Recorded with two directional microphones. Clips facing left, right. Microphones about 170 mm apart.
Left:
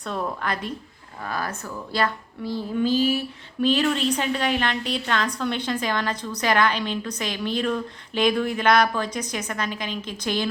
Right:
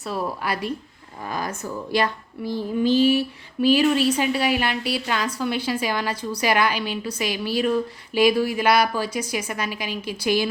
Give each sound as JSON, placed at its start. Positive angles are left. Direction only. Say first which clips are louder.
{"t": 0.0, "sound": "a woman's voice", "louder": "right 1 dB", "side_deg": -5}